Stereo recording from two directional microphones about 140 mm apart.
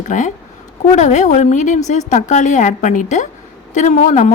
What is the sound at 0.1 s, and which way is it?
A woman's voice, 60° left (ahead or behind).